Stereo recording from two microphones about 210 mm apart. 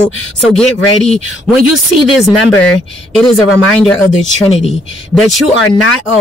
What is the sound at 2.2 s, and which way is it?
Speech, centre (ahead or behind).